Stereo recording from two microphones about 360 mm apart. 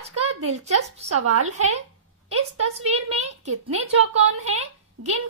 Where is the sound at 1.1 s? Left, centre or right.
Right.